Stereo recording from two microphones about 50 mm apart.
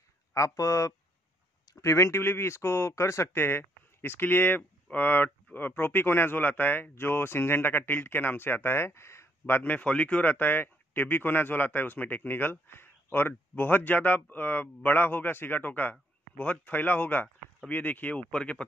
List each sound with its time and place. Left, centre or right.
0.3 s speech: left
2.2 s speech: left
3.3 s speech: left
9.7 s speech: left
10.2 s speech: left